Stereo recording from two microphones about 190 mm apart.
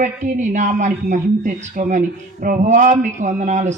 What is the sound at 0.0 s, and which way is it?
Speech, 40° right (ahead or behind).